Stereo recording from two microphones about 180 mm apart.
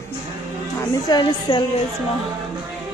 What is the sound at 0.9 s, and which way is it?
Speech, 20° left (ahead or behind).